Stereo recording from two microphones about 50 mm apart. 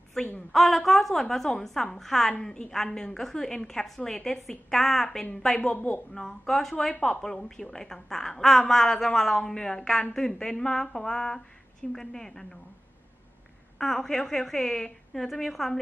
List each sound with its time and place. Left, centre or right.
0.5 s a woman's voice: centre
5.6 s speech: left
6.1 s a woman's voice: centre
13.7 s a woman's voice: centre